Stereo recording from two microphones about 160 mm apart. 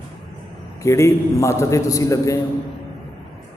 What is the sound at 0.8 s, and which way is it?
A man's voice, 20° left (ahead or behind).